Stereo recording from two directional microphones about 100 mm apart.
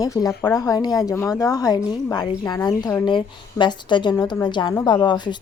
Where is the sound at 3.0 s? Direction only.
50° left (ahead or behind).